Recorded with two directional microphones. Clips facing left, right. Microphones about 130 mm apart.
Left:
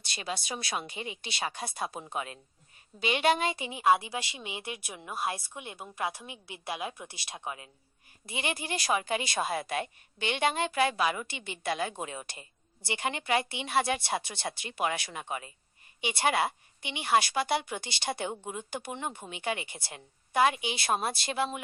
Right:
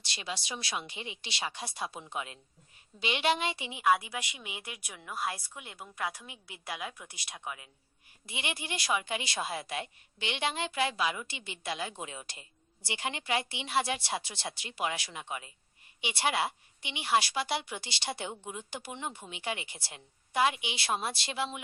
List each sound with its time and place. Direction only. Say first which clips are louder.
0.1 s a woman's voice: left 3 dB; 50° left (ahead or behind)
3.8 s a woman's voice: left 2 dB; 30° left (ahead or behind)
8.3 s a woman's voice: left 4 dB; 40° left (ahead or behind)